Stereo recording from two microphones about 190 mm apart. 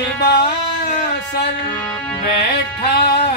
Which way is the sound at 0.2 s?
55° left (ahead or behind).